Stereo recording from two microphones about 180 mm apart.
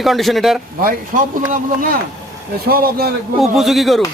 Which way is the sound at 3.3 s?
Centre (ahead or behind).